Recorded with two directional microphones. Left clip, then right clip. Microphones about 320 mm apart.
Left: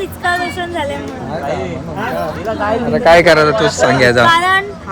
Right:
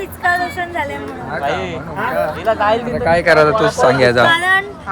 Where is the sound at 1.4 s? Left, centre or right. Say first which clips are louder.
Right 1 dB; right.